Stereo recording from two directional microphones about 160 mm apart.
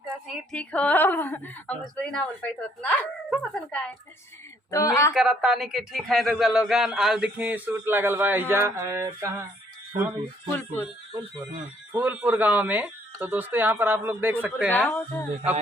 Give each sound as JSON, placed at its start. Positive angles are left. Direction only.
{"t": 0.5, "sound": "a woman's voice", "side_deg": 10}
{"t": 4.7, "sound": "speech", "side_deg": 20}
{"t": 5.1, "sound": "a man's voice", "side_deg": -5}
{"t": 11.9, "sound": "speech", "side_deg": -10}
{"t": 14.7, "sound": "a woman's voice", "side_deg": 10}